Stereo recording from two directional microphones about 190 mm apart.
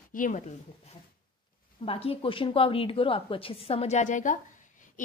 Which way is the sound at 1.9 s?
30° left (ahead or behind).